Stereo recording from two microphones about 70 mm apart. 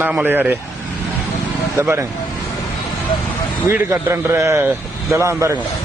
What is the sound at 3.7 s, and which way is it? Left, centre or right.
A man's voice, right.